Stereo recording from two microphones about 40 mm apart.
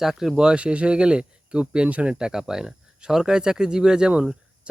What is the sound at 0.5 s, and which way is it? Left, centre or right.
Speech, right.